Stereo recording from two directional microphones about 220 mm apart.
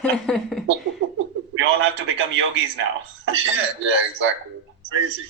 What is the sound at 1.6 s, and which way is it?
Speech, 60° right (ahead or behind).